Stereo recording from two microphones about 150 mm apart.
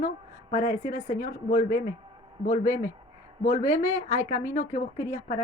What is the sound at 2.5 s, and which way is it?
Speech, 60° left (ahead or behind).